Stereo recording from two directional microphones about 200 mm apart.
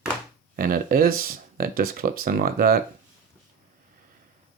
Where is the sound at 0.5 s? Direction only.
45° right (ahead or behind).